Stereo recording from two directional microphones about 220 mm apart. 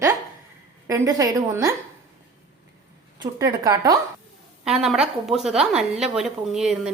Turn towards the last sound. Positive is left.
turn(degrees=0)  # may be behind; listen again after turning